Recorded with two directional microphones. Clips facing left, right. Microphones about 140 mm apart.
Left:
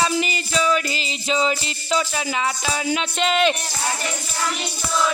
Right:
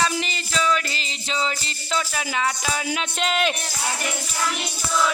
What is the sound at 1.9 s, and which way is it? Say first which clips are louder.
Speech: left 3 dB; 5° left (ahead or behind).